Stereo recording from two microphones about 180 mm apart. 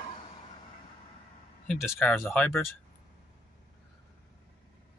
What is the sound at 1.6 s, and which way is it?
Speech, 15° left (ahead or behind).